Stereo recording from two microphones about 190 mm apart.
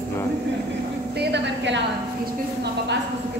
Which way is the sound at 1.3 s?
65° right (ahead or behind).